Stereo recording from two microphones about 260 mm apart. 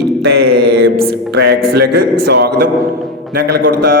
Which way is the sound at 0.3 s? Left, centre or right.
Right.